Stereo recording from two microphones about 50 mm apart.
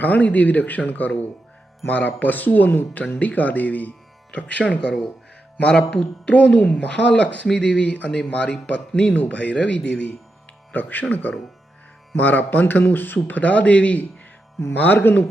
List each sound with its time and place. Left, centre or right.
0.0 s speech: left
13.2 s speech: left